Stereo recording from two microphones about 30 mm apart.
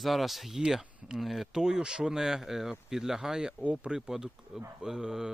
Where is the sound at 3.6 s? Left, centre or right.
Right.